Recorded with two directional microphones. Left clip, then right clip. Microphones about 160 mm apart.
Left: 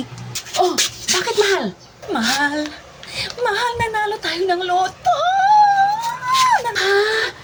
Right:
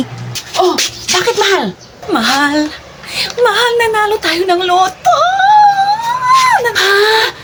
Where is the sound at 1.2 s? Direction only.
25° right (ahead or behind).